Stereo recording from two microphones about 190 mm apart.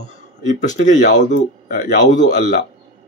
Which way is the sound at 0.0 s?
40° left (ahead or behind).